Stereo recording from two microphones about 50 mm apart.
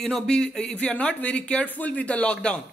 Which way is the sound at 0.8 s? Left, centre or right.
Left.